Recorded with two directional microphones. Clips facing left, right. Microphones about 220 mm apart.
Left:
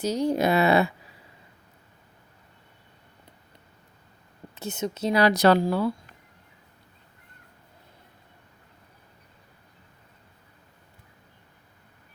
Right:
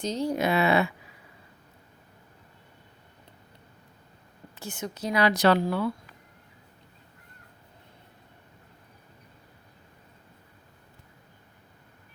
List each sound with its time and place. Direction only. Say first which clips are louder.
0.0 s speech: left 3 dB; 10° left (ahead or behind)
0.3 s speech: left 2 dB; 40° left (ahead or behind)
4.5 s a woman's voice: left 6 dB; 20° left (ahead or behind)
5.2 s speech: left 2 dB; 40° left (ahead or behind)